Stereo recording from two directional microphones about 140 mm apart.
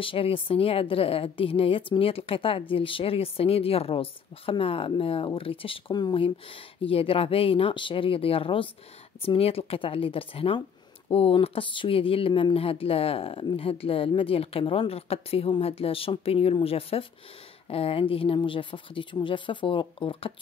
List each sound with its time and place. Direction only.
0.0 s a woman's voice: 40° left (ahead or behind)